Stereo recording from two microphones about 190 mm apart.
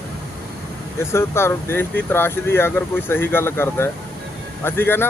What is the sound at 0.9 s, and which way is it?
Speech, 15° left (ahead or behind).